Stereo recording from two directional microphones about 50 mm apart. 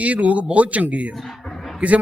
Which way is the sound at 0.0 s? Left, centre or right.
Right.